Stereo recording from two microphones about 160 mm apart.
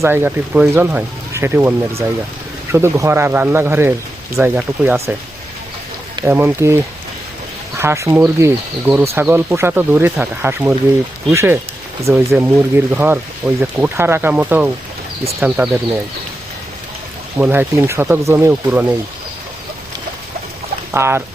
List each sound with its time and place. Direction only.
0.0 s speech: 15° right (ahead or behind)
6.2 s speech: 15° right (ahead or behind)
17.3 s speech: 10° right (ahead or behind)
20.9 s speech: 15° right (ahead or behind)